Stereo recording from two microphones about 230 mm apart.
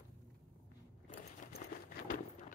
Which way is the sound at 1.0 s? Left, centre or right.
Left.